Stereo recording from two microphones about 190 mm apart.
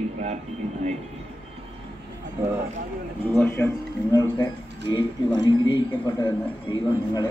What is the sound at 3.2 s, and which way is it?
A man's voice, 10° left (ahead or behind).